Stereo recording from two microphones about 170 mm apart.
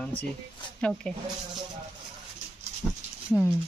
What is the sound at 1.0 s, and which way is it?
Speech, 5° left (ahead or behind).